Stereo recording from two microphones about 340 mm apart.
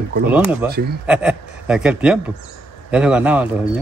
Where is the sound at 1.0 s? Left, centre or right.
Centre.